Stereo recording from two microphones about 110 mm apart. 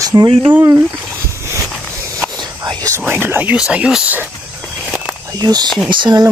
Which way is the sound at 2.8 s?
25° right (ahead or behind).